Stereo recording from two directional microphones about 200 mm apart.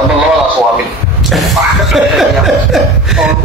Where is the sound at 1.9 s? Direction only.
Centre (ahead or behind).